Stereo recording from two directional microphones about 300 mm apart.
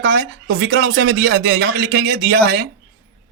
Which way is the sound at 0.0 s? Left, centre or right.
Right.